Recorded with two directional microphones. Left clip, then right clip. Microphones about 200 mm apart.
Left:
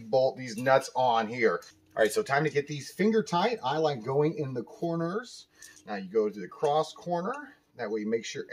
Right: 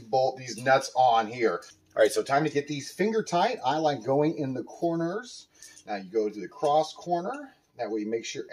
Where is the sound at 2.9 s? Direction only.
10° right (ahead or behind).